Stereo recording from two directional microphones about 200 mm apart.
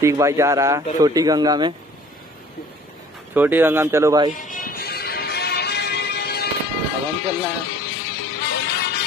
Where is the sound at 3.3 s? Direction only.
10° right (ahead or behind).